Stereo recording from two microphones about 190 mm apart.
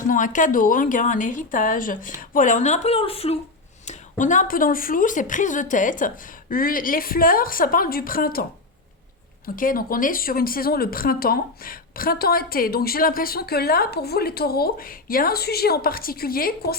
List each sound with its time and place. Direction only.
0.1 s a woman's voice: 45° left (ahead or behind)
3.8 s a woman's voice: 40° left (ahead or behind)
9.6 s a woman's voice: 45° left (ahead or behind)